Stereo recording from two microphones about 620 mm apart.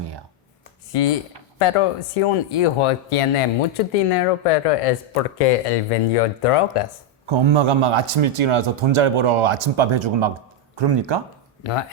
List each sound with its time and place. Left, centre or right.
1.5 s speech: left
7.3 s a man's voice: right
11.6 s speech: left